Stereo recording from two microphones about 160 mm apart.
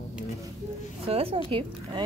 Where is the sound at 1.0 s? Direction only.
35° right (ahead or behind).